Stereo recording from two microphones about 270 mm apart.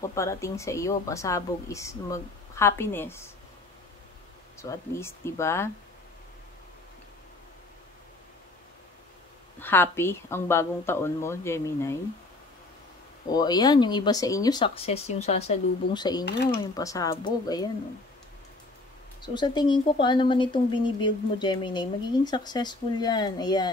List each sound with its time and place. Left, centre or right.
0.0 s speech: centre
4.6 s speech: centre
9.6 s speech: centre
13.3 s speech: centre
19.2 s speech: centre